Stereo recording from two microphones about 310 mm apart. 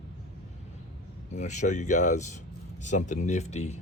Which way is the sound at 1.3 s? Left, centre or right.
Left.